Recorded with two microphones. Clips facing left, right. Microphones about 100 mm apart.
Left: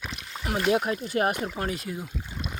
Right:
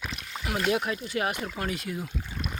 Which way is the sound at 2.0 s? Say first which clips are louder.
Right 1 dB; 10° left (ahead or behind).